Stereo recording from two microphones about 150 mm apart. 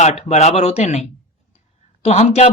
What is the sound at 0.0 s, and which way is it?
Speech, 50° left (ahead or behind).